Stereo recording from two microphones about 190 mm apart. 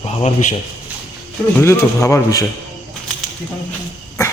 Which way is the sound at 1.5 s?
15° left (ahead or behind).